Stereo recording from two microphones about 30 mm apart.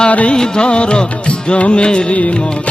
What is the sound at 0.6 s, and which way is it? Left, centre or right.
Music, left.